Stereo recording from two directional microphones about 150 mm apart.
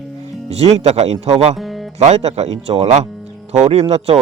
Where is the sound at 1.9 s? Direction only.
45° right (ahead or behind).